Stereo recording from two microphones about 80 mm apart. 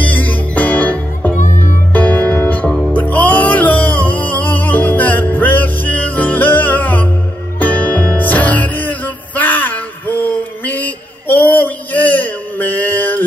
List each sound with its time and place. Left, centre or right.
0.0 s music: centre